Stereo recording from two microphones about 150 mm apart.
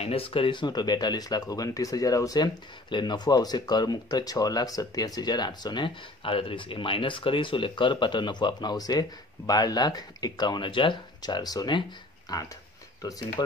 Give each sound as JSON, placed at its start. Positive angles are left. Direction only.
{"t": 0.0, "sound": "speech", "side_deg": 40}